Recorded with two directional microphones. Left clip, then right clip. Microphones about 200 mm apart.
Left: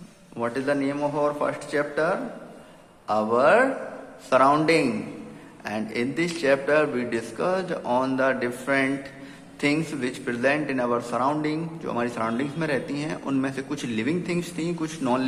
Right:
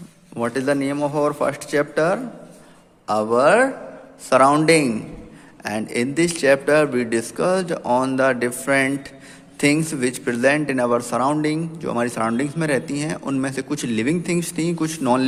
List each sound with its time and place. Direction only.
0.3 s a man's voice: 50° right (ahead or behind)